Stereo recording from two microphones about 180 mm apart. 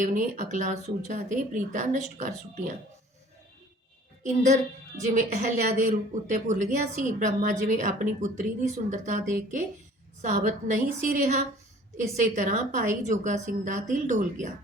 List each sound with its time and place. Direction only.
0.0 s a woman's voice: 45° right (ahead or behind)
4.9 s a woman's voice: 40° right (ahead or behind)